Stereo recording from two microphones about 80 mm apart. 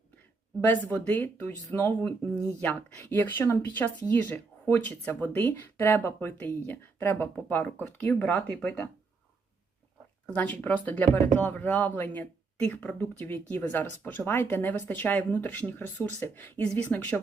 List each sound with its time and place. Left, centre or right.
0.6 s speech: left
10.3 s speech: centre